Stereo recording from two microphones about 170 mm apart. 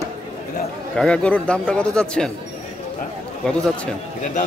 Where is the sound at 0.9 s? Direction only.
5° left (ahead or behind).